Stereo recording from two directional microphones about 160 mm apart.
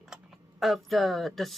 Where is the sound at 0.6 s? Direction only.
Centre (ahead or behind).